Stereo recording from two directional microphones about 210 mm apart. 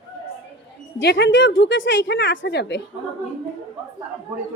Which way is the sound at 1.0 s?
55° left (ahead or behind).